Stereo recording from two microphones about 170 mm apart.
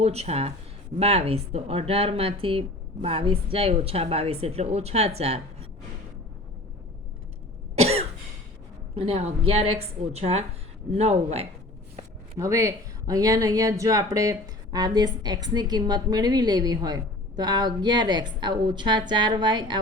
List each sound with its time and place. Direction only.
0.0 s speech: 40° right (ahead or behind)
7.8 s cough: 40° right (ahead or behind)
9.0 s speech: 35° right (ahead or behind)
12.4 s speech: 20° right (ahead or behind)